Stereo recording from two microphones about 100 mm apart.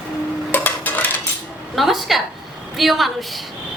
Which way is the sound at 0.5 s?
20° left (ahead or behind).